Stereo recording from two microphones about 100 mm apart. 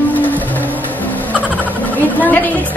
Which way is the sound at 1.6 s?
15° left (ahead or behind).